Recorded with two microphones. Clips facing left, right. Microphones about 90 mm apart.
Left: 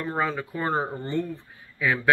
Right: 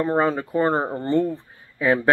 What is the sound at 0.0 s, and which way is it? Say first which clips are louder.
Speech: right 7 dB; 35° right (ahead or behind).